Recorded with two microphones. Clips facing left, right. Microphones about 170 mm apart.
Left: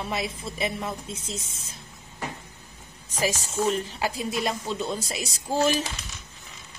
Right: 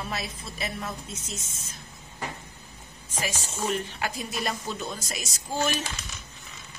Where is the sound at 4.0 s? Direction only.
25° left (ahead or behind).